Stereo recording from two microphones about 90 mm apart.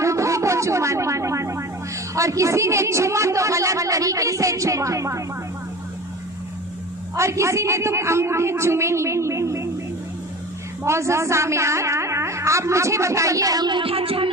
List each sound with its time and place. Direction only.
0.0 s a sound: 35° right (ahead or behind)
2.1 s a woman's voice: 35° right (ahead or behind)
7.2 s a woman's voice: 35° right (ahead or behind)
10.8 s a woman's voice: 30° right (ahead or behind); by 14.3 s 90° right